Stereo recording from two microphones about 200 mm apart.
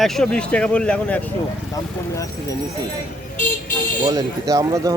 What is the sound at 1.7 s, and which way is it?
Speech, 15° left (ahead or behind).